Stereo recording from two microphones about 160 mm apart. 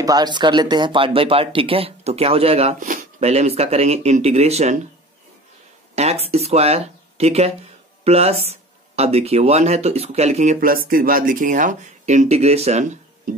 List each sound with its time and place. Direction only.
0.0 s speech: 25° right (ahead or behind); by 4.7 s 40° right (ahead or behind)
5.9 s speech: 40° right (ahead or behind)